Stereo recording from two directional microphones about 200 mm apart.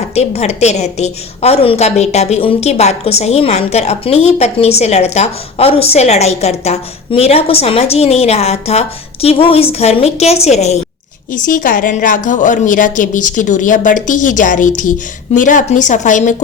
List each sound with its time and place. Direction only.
0.1 s a woman's voice: 35° left (ahead or behind)